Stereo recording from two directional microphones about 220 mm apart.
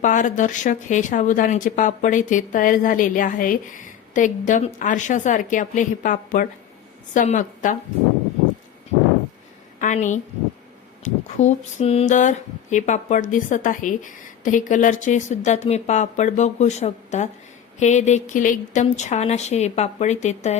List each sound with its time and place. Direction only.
0.0 s speech: 35° left (ahead or behind)
9.8 s speech: 35° left (ahead or behind)